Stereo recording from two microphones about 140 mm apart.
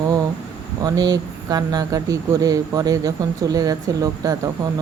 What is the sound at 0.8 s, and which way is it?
Speech, 25° right (ahead or behind).